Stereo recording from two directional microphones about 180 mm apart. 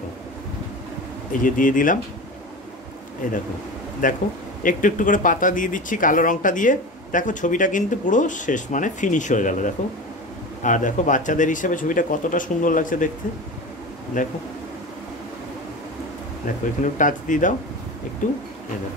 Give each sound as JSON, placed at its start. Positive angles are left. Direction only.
{"t": 1.4, "sound": "speech", "side_deg": 45}
{"t": 4.0, "sound": "speech", "side_deg": 45}
{"t": 14.2, "sound": "speech", "side_deg": 45}
{"t": 16.8, "sound": "speech", "side_deg": 45}